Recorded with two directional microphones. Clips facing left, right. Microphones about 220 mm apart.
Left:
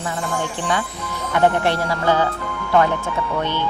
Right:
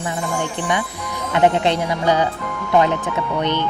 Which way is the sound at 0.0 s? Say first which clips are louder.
Right 1 dB; 15° right (ahead or behind).